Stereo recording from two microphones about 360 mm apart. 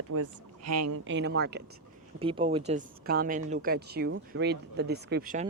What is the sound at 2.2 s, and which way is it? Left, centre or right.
Speech, centre.